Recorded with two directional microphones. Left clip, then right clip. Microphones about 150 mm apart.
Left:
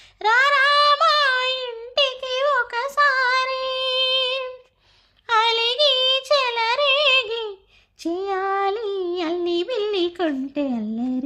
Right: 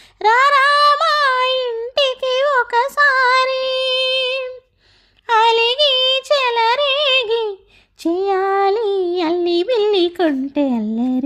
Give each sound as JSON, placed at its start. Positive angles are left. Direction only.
{"t": 0.2, "sound": "child singing", "side_deg": -25}
{"t": 8.0, "sound": "female singing", "side_deg": -30}